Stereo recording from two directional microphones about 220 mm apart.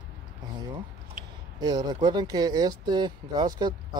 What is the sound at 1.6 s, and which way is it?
Speech, 20° right (ahead or behind).